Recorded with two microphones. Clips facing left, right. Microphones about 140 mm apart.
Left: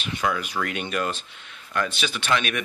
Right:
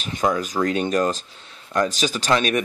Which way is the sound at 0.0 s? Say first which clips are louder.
Right 4 dB; 40° right (ahead or behind).